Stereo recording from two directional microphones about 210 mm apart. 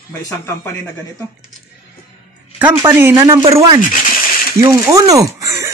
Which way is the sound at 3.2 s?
20° right (ahead or behind).